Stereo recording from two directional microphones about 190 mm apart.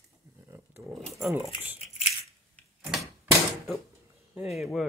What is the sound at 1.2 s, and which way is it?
Speech, 15° right (ahead or behind).